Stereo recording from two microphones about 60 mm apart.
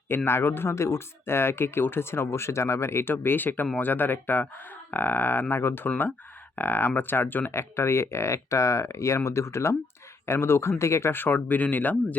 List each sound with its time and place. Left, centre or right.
0.3 s speech: left
5.9 s speech: left
7.5 s speech: left
11.1 s speech: left